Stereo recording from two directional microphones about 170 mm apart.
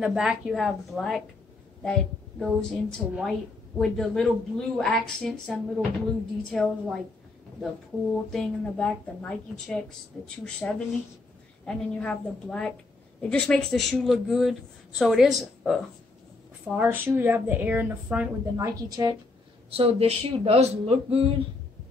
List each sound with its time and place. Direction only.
0.0 s a woman's voice: 5° right (ahead or behind)
18.8 s a woman's voice: 20° right (ahead or behind)
19.7 s speech: 35° right (ahead or behind)